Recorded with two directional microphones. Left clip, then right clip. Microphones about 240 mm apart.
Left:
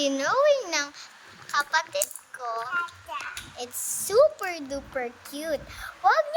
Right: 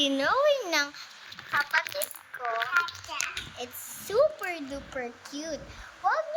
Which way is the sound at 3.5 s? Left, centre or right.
Centre.